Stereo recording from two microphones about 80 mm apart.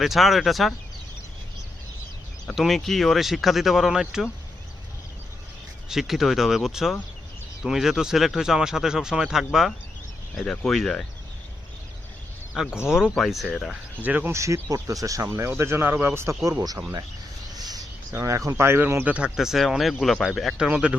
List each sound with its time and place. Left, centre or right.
0.0 s speech: centre
2.6 s speech: centre
5.9 s speech: centre
10.3 s speech: centre
12.6 s speech: centre
14.0 s speech: right
14.3 s speech: right
16.4 s speech: right
18.2 s speech: right
19.1 s speech: centre